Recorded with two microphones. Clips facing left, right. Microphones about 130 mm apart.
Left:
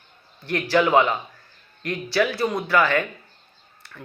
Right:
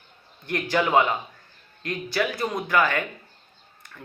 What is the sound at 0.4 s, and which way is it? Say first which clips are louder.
Speech: left 4 dB; 20° right (ahead or behind).